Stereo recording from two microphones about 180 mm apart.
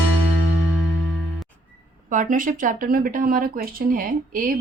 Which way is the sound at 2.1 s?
45° right (ahead or behind).